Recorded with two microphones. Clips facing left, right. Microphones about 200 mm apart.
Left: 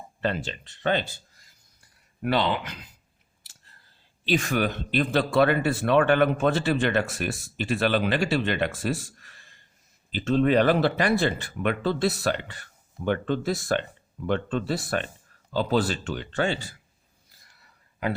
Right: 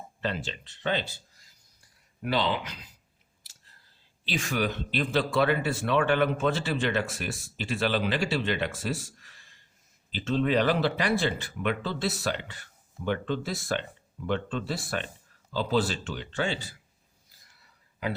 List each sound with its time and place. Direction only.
0.2 s a man's voice: 50° left (ahead or behind)
4.3 s a man's voice: 55° left (ahead or behind)